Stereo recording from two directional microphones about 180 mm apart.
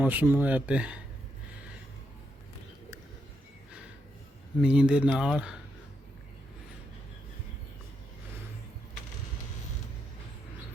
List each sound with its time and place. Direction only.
0.0 s speech: 10° right (ahead or behind)
4.6 s speech: 5° right (ahead or behind)